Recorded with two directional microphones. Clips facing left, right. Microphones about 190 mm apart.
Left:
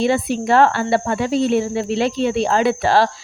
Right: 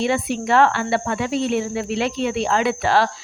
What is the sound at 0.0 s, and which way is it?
Speech, 35° left (ahead or behind).